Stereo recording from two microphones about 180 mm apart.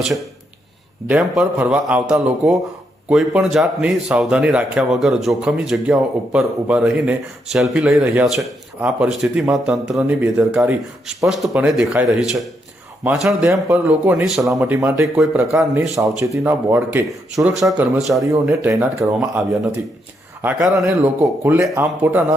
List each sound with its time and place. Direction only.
1.0 s speech: 5° right (ahead or behind)
14.5 s speech: 15° right (ahead or behind)
17.6 s speech: centre (ahead or behind)
18.1 s speech: 15° right (ahead or behind)
20.4 s speech: 15° right (ahead or behind)